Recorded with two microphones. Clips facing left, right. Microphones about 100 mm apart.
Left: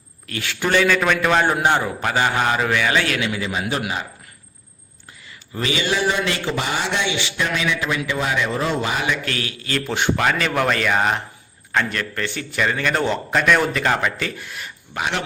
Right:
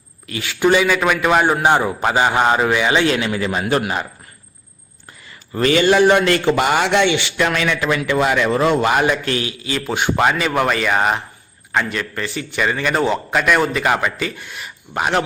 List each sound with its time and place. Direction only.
0.3 s a man's voice: 5° right (ahead or behind); by 3.2 s 20° right (ahead or behind)
3.2 s a man's voice: 35° right (ahead or behind)
3.4 s a man's voice: 50° right (ahead or behind)
5.5 s a man's voice: 50° right (ahead or behind)
9.1 s a man's voice: 30° right (ahead or behind)
9.6 s a man's voice: 10° right (ahead or behind)
14.9 s a man's voice: 40° right (ahead or behind)